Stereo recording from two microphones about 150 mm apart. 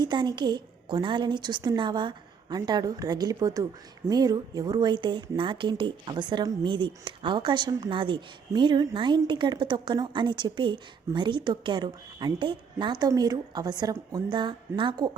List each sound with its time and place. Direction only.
0.0 s a woman's voice: 30° right (ahead or behind)